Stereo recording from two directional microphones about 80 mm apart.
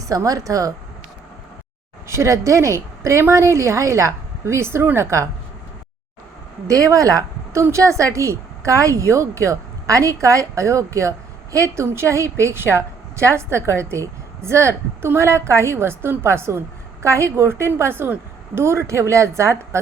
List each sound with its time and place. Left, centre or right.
0.0 s speech: right
2.0 s a woman's voice: right
6.7 s a woman's voice: right